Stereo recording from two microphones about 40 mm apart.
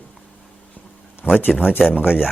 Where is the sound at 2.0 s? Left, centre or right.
Centre.